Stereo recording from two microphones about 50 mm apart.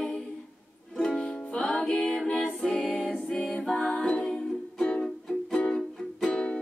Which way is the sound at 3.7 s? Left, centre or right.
Left.